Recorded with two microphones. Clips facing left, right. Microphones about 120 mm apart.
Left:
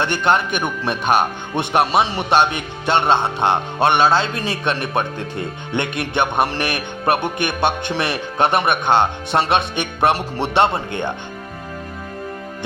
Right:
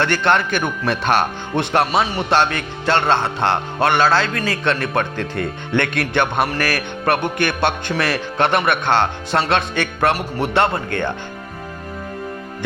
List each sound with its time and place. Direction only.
0.0 s a man's voice: 15° left (ahead or behind)